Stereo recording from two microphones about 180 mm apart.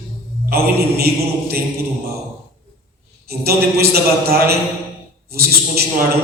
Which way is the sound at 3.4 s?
60° right (ahead or behind).